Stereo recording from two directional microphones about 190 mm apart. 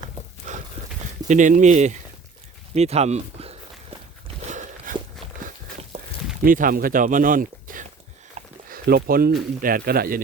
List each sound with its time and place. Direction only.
0.4 s a sound: 45° right (ahead or behind)
1.3 s speech: 40° right (ahead or behind)
4.4 s walk: 40° right (ahead or behind)
6.4 s speech: 45° right (ahead or behind)
8.4 s a sound: 50° right (ahead or behind)
9.6 s speech: 50° right (ahead or behind)